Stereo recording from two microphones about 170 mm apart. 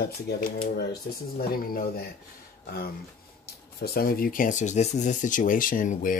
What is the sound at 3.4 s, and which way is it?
Speech, 65° left (ahead or behind).